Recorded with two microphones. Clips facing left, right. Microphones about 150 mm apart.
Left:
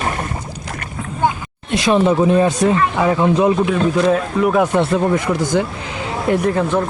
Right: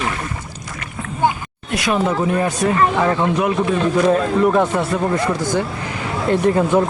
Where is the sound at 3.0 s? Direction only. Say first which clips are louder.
Left 3 dB; 10° left (ahead or behind).